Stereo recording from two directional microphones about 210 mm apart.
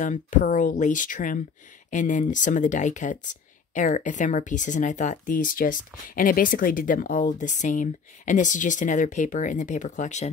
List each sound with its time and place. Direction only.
0.0 s speech: 35° left (ahead or behind)